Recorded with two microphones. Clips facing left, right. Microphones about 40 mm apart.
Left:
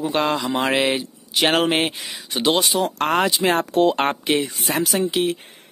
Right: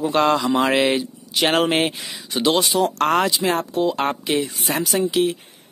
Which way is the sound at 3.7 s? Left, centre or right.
Left.